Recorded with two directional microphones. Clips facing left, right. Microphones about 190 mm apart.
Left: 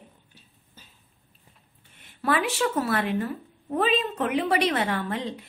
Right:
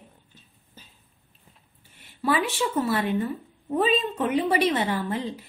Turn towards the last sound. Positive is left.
turn(degrees=0)  # may be behind; listen again after turning